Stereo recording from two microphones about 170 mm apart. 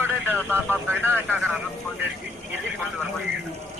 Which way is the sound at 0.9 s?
10° right (ahead or behind).